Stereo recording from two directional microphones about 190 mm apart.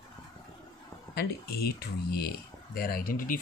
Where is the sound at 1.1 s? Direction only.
55° left (ahead or behind).